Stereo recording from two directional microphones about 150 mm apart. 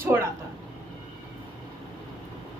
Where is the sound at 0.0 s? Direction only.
15° right (ahead or behind).